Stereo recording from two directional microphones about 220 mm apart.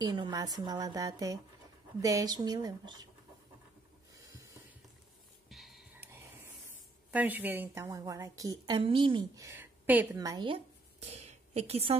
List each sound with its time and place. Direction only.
0.0 s a woman's voice: 20° right (ahead or behind)
5.5 s whispering: centre (ahead or behind)
7.1 s a woman's voice: 5° right (ahead or behind); by 12.0 s 25° right (ahead or behind)